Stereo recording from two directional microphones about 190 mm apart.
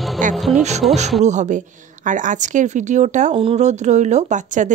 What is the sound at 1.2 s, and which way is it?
Speech, 40° right (ahead or behind).